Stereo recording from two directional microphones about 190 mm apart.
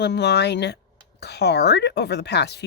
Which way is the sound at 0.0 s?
65° left (ahead or behind).